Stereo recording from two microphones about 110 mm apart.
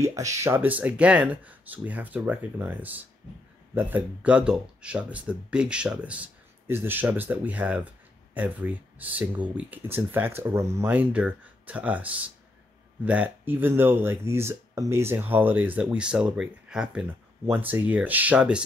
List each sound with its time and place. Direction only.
0.0 s speech: 30° right (ahead or behind)
0.6 s speech: 15° right (ahead or behind)